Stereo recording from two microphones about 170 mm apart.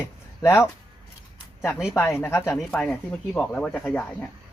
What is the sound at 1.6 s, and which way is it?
Speech, centre (ahead or behind).